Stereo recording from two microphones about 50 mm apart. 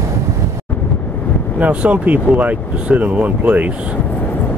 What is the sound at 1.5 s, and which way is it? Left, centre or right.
Speech, right.